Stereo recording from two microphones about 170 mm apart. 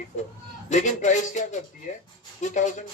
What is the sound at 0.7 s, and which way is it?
Speech, 45° left (ahead or behind).